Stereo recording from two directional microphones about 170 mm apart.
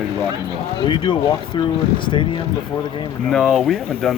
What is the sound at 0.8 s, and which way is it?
Speech, 30° left (ahead or behind).